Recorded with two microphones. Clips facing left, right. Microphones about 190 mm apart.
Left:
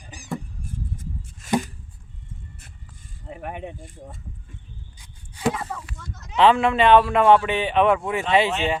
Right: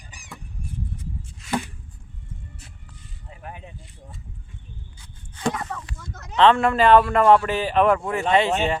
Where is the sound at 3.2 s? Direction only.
65° left (ahead or behind).